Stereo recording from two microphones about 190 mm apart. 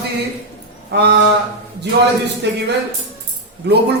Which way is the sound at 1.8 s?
60° right (ahead or behind).